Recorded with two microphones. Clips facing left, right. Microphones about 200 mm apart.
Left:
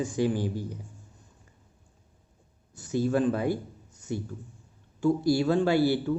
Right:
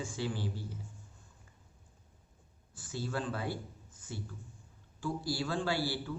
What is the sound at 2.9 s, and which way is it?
Speech, 20° left (ahead or behind).